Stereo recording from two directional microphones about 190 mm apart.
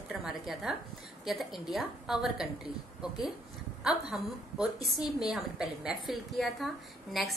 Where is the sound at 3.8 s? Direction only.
5° right (ahead or behind).